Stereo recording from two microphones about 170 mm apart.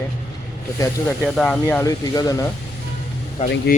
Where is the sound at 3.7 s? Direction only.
65° left (ahead or behind).